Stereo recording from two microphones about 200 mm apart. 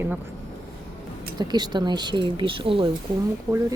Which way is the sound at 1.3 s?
20° right (ahead or behind).